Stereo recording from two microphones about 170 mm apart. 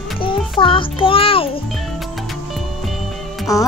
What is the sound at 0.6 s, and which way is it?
A child's voice, 30° left (ahead or behind).